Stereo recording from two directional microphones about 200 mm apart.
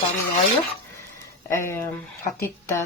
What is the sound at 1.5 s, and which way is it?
Speech, 15° left (ahead or behind).